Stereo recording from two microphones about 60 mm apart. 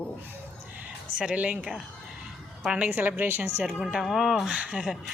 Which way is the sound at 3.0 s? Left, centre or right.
Right.